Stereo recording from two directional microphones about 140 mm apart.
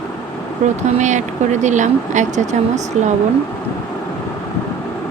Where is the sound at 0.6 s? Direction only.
60° right (ahead or behind).